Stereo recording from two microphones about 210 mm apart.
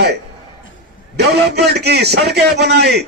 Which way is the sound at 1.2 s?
50° right (ahead or behind).